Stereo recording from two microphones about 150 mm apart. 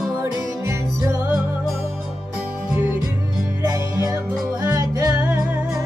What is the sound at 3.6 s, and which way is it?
Music, 20° right (ahead or behind).